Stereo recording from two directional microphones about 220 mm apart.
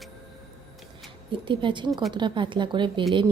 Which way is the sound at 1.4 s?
20° right (ahead or behind).